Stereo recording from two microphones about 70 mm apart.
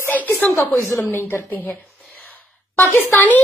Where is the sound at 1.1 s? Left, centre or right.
Left.